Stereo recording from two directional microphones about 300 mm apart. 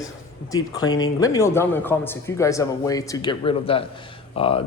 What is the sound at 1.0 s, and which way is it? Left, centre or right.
A man's voice, centre.